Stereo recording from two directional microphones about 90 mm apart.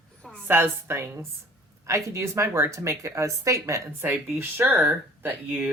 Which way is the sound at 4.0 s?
25° right (ahead or behind).